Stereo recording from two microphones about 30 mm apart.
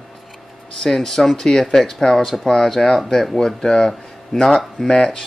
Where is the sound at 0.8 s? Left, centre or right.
Centre.